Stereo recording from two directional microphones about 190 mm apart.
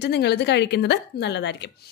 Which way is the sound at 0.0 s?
60° left (ahead or behind).